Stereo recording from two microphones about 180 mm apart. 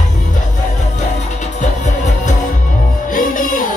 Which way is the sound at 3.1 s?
50° left (ahead or behind).